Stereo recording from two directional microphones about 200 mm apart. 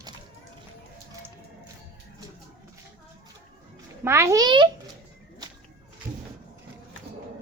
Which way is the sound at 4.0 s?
15° right (ahead or behind).